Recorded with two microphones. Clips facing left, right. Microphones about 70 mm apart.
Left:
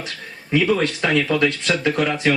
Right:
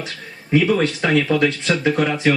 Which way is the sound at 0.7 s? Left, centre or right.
Centre.